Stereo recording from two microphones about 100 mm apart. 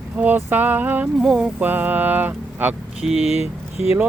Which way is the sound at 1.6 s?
20° right (ahead or behind).